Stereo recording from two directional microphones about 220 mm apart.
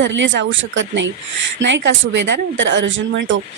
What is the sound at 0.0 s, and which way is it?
Speech, 55° right (ahead or behind).